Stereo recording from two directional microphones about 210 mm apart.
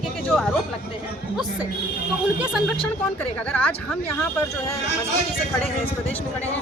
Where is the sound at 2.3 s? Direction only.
5° right (ahead or behind).